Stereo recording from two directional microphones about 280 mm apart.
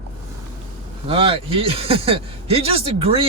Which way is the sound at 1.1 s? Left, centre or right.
Centre.